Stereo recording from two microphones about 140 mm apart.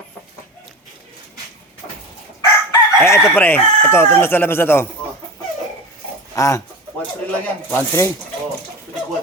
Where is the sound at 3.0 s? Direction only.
20° left (ahead or behind).